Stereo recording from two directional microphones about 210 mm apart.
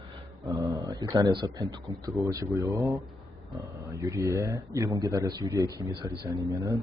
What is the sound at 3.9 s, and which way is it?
A man's voice, 15° right (ahead or behind).